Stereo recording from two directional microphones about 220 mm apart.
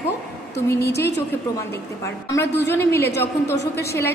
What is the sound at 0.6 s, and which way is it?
A woman's voice, 15° left (ahead or behind).